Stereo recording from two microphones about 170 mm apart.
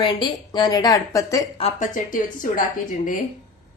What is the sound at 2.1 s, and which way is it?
Speech, 55° left (ahead or behind).